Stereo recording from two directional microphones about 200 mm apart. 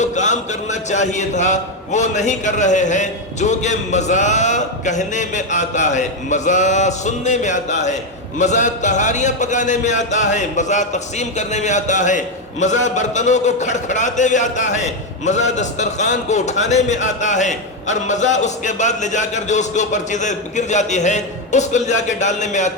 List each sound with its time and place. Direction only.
0.0 s speech: 35° left (ahead or behind)